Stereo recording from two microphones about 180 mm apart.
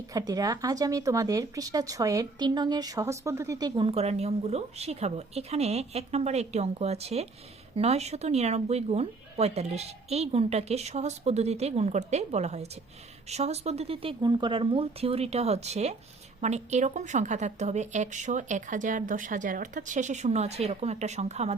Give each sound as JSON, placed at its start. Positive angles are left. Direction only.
{"t": 0.1, "sound": "speech", "side_deg": -20}